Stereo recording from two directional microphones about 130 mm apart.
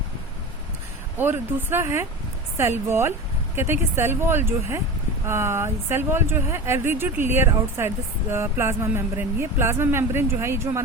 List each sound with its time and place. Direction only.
1.2 s speech: 15° right (ahead or behind)